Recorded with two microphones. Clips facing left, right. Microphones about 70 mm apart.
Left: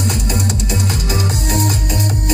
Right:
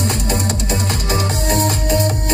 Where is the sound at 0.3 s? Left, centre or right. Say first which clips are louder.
Right 1 dB; right.